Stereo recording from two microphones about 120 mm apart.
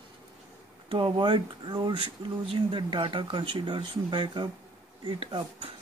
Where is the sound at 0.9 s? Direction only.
45° right (ahead or behind).